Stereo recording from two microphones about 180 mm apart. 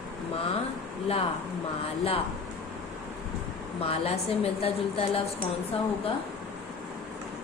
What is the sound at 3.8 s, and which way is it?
Speech, 35° left (ahead or behind).